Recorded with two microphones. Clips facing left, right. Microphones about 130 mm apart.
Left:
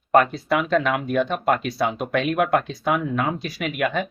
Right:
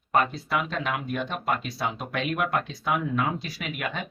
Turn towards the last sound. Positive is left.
turn(degrees=65)  # may be behind; listen again after turning